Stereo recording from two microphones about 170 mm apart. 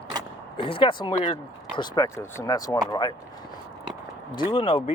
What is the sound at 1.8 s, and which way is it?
Speech, 20° left (ahead or behind).